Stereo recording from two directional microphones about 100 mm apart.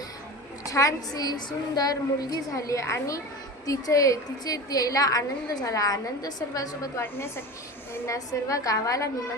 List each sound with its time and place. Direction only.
0.6 s a woman's voice: 35° left (ahead or behind)
7.0 s a woman's voice: 20° left (ahead or behind)